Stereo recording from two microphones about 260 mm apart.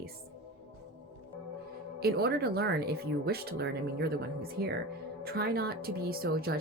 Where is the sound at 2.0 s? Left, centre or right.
Right.